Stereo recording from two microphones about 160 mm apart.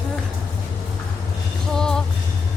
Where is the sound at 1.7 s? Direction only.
5° left (ahead or behind).